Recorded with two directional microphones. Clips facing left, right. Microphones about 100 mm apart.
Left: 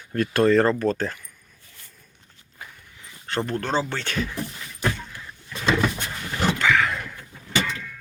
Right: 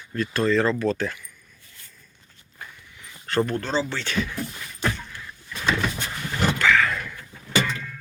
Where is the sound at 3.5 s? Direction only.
55° left (ahead or behind).